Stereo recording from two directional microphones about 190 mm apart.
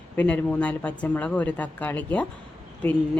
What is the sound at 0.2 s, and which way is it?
Speech, 5° left (ahead or behind).